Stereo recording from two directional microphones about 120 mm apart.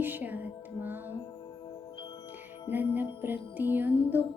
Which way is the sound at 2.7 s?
15° right (ahead or behind).